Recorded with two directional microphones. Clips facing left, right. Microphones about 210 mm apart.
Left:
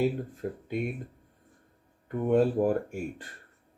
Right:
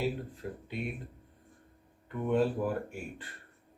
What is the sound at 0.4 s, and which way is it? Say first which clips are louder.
Speech: left 6 dB; 50° left (ahead or behind).